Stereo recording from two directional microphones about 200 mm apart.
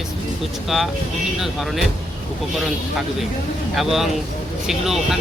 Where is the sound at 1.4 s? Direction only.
Centre (ahead or behind).